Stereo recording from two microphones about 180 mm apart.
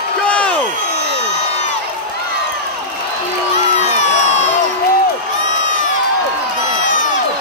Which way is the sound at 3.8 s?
40° left (ahead or behind).